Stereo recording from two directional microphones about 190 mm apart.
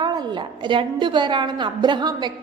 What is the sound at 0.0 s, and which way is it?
A woman's voice, 20° right (ahead or behind).